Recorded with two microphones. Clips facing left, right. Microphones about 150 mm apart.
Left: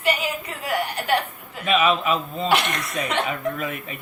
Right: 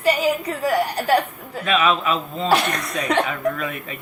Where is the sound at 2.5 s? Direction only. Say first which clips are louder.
Right 3 dB; 40° right (ahead or behind).